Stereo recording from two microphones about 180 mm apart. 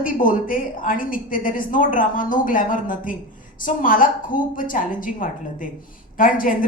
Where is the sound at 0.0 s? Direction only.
50° left (ahead or behind).